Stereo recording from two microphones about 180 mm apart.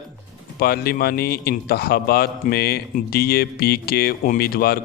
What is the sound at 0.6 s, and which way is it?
A man's voice, 60° left (ahead or behind).